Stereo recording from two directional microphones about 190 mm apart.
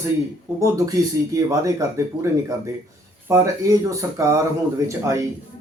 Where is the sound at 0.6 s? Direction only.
15° right (ahead or behind).